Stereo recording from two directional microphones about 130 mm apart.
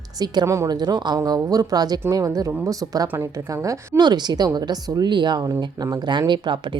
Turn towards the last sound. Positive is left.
turn(degrees=-35)  # may be behind; listen again after turning